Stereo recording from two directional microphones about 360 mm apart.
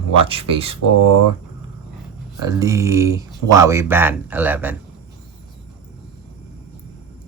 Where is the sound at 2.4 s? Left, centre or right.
Centre.